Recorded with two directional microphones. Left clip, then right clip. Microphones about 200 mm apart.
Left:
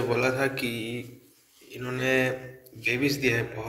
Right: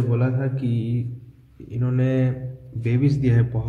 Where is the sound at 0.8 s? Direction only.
15° right (ahead or behind).